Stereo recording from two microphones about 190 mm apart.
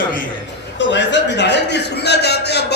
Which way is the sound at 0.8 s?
70° left (ahead or behind).